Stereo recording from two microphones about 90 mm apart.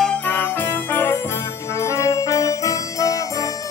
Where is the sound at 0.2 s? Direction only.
20° left (ahead or behind).